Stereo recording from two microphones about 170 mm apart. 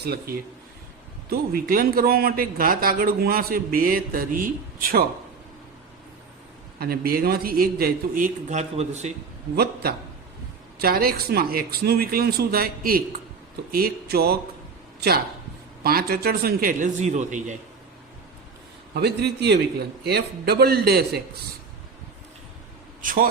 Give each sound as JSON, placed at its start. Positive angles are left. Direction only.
{"t": 0.0, "sound": "a man's voice", "side_deg": -70}
{"t": 6.7, "sound": "a man's voice", "side_deg": -65}
{"t": 10.8, "sound": "a man's voice", "side_deg": -60}
{"t": 15.8, "sound": "a man's voice", "side_deg": -65}
{"t": 18.9, "sound": "a man's voice", "side_deg": -75}
{"t": 23.0, "sound": "speech", "side_deg": -55}